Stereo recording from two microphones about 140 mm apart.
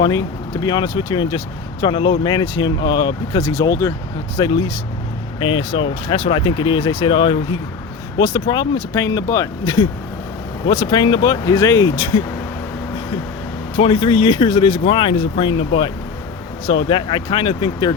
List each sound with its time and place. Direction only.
0.0 s speech: 30° left (ahead or behind)
3.4 s speech: 20° left (ahead or behind)
4.4 s speech: 35° left (ahead or behind)
8.5 s speech: 30° left (ahead or behind)
13.7 s speech: 40° left (ahead or behind)